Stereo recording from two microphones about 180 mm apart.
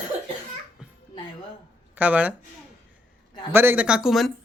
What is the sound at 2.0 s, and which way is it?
Speech, 10° right (ahead or behind).